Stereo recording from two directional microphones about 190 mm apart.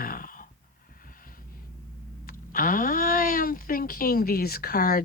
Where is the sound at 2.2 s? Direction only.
50° left (ahead or behind).